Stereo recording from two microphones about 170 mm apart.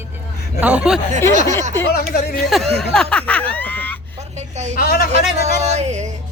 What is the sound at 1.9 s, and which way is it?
Speech, 60° left (ahead or behind).